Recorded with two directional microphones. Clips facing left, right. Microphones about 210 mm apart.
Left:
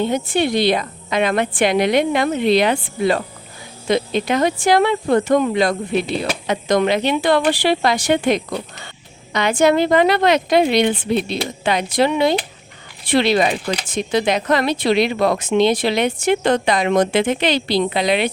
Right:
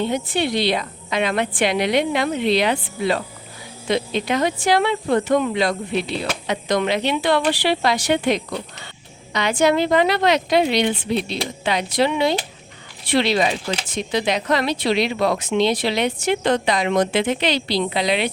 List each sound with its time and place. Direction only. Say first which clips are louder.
0.0 s speech: left 3 dB; 45° left (ahead or behind)